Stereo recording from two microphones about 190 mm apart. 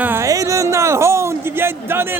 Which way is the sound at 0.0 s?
15° right (ahead or behind).